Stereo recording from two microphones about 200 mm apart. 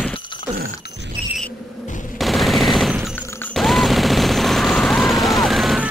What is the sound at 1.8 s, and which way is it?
Machine gun, 40° left (ahead or behind).